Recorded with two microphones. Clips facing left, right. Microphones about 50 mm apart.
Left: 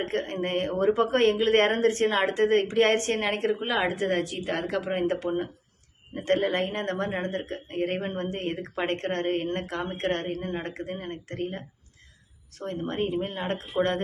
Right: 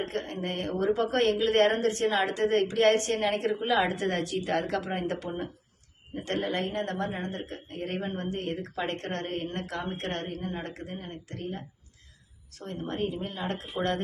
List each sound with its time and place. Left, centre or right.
0.0 s speech: left
10.9 s speech: left